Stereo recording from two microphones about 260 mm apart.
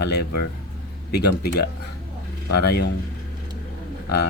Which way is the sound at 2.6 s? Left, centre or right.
Left.